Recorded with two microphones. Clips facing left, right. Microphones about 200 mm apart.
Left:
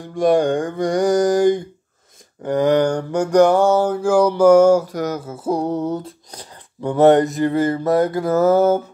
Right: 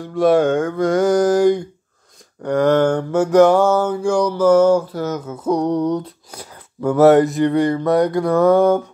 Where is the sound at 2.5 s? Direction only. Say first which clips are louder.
Right 1 dB; 15° left (ahead or behind).